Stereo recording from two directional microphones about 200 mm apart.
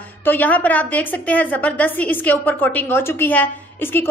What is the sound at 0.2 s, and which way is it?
A woman's voice, 10° left (ahead or behind).